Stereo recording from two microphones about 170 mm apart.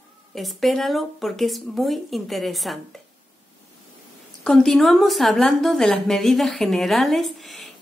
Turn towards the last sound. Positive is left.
turn(degrees=0)  # may be behind; listen again after turning